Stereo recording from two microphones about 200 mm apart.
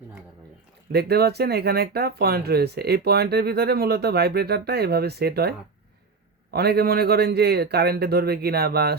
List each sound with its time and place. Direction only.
0.9 s speech: 55° right (ahead or behind)